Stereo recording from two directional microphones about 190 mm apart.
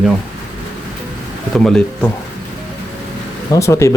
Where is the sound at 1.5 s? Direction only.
5° left (ahead or behind).